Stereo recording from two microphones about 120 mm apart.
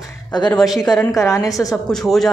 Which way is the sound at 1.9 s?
Centre (ahead or behind).